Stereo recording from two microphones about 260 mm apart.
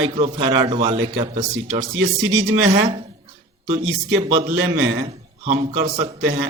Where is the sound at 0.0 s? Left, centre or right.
Right.